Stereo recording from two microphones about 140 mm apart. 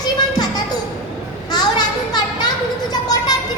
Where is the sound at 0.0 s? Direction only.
30° left (ahead or behind).